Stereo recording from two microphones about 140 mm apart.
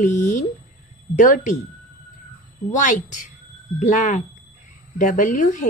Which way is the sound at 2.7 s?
65° left (ahead or behind).